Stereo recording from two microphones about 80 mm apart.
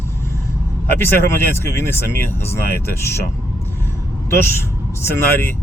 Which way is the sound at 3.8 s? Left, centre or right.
Left.